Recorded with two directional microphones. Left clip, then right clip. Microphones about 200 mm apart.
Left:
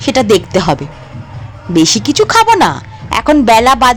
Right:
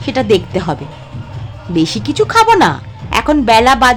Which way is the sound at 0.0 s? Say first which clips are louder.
Left 3 dB; 20° left (ahead or behind).